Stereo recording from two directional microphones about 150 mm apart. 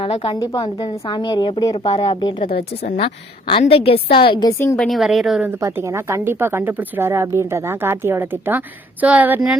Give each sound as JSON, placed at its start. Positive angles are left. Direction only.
{"t": 0.0, "sound": "a woman's voice", "side_deg": 40}
{"t": 2.4, "sound": "a woman's voice", "side_deg": 90}
{"t": 2.8, "sound": "a woman's voice", "side_deg": 50}
{"t": 4.4, "sound": "a woman's voice", "side_deg": 20}
{"t": 4.8, "sound": "a woman's voice", "side_deg": 0}
{"t": 5.5, "sound": "speech", "side_deg": -20}